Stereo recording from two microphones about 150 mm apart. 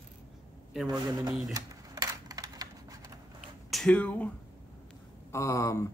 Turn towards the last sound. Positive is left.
turn(degrees=20)  # may be behind; listen again after turning